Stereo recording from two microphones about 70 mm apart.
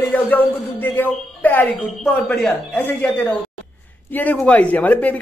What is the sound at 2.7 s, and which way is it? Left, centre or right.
A man's voice, left.